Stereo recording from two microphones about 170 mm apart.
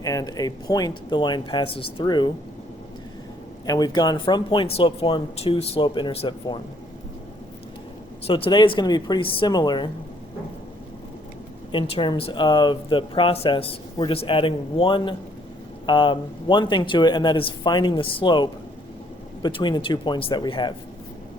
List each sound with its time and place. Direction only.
0.0 s speech: 20° left (ahead or behind)
3.7 s speech: 25° left (ahead or behind)
8.3 s speech: 30° left (ahead or behind)
11.7 s speech: 30° left (ahead or behind)